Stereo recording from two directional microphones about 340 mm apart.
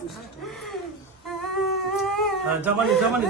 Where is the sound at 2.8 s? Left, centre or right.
Centre.